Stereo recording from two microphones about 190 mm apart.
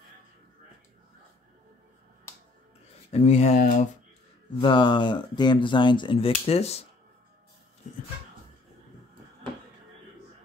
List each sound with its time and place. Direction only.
3.1 s speech: 35° left (ahead or behind)
4.6 s speech: 25° left (ahead or behind)